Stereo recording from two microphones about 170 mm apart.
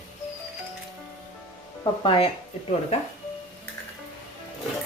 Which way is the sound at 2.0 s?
35° left (ahead or behind).